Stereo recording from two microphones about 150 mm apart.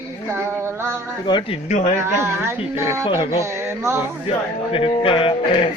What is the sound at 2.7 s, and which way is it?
Speech, 20° right (ahead or behind).